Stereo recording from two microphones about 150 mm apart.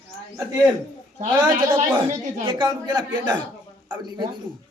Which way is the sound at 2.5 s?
30° right (ahead or behind).